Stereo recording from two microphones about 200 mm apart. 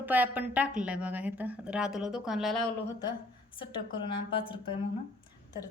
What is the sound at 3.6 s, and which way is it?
A woman's voice, 25° left (ahead or behind).